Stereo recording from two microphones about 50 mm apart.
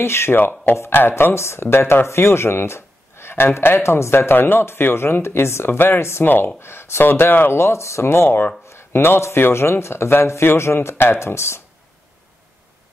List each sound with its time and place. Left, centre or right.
0.0 s speech: left
0.4 s speech: left
6.2 s speech: left
6.6 s speech: left
7.5 s speech: left
8.6 s a sound: left
9.4 s speech: left